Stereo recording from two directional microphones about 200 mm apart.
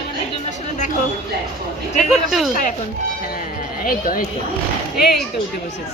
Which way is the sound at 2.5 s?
40° left (ahead or behind).